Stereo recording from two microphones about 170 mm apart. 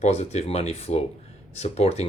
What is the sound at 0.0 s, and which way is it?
Speech, 40° left (ahead or behind).